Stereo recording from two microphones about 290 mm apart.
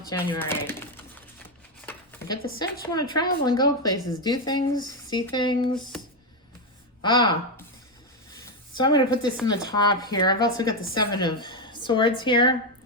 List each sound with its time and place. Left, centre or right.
0.1 s speech: centre
2.6 s speech: centre
7.0 s speech: centre
8.8 s speech: centre